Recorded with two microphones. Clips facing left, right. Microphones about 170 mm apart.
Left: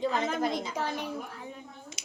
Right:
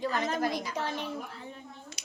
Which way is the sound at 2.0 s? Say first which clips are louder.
Left 1 dB; 25° left (ahead or behind).